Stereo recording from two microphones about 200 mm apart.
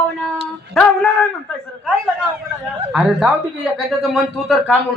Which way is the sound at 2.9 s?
Centre (ahead or behind).